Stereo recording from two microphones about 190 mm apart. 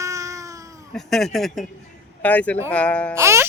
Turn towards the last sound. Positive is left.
turn(degrees=-15)  # may be behind; listen again after turning